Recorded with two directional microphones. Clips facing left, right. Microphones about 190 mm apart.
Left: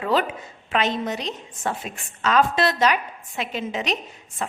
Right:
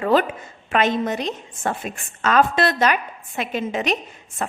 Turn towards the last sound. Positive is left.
turn(degrees=-50)  # may be behind; listen again after turning